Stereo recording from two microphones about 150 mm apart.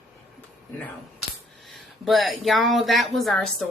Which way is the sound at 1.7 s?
Centre (ahead or behind).